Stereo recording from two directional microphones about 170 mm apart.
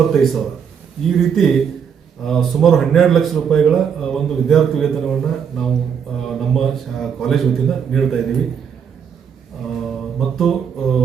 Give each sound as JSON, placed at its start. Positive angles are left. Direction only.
{"t": 0.1, "sound": "speech", "side_deg": 0}
{"t": 9.8, "sound": "mantra", "side_deg": 0}